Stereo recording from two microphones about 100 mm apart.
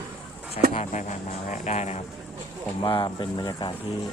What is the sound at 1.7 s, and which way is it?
Speech, 90° left.